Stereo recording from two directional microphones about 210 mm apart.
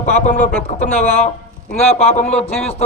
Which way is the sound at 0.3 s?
40° left (ahead or behind).